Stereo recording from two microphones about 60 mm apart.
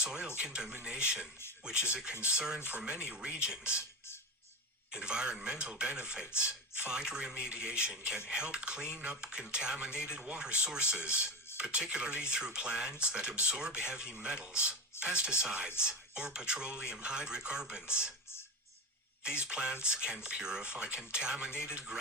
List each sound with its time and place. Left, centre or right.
0.0 s speech: centre
2.6 s speech: right
2.9 s speech: centre
4.9 s speech: centre
19.4 s speech: centre